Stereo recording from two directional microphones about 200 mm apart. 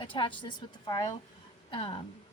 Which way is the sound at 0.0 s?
25° left (ahead or behind).